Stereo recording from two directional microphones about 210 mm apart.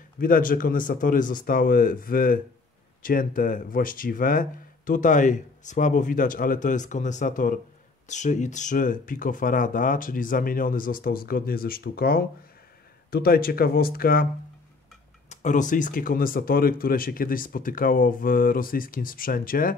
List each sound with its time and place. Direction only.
0.2 s speech: 40° left (ahead or behind)
15.2 s speech: 35° left (ahead or behind)